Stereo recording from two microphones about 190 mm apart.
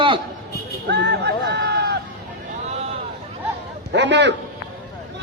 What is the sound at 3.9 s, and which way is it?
Speech, 65° right (ahead or behind).